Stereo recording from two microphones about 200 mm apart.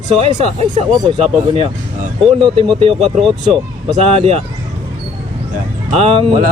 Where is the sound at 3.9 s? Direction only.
30° right (ahead or behind).